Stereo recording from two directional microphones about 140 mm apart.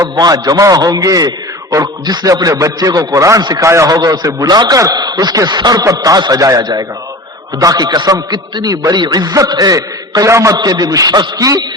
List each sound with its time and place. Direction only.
0.0 s a man's voice: 25° right (ahead or behind)